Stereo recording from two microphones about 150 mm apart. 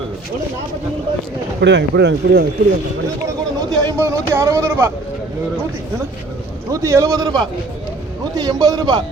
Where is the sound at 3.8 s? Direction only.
20° right (ahead or behind).